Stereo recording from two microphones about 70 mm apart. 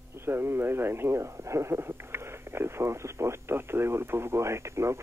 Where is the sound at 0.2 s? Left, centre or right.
Right.